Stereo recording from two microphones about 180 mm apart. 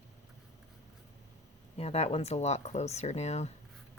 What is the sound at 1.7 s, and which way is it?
Speech, 35° left (ahead or behind).